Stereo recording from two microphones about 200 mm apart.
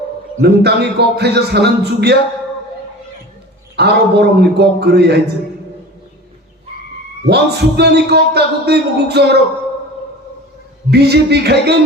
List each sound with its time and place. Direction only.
0.4 s a man's voice: 55° right (ahead or behind)
3.8 s a man's voice: 55° right (ahead or behind)
7.3 s a man's voice: 55° right (ahead or behind)
10.9 s a man's voice: 55° right (ahead or behind)